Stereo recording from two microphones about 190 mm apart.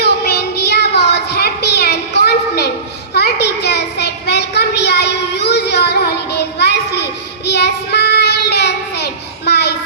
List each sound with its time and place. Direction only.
0.0 s child singing: 55° left (ahead or behind)